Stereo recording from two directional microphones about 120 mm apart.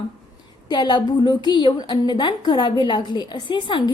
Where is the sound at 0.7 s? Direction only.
40° left (ahead or behind).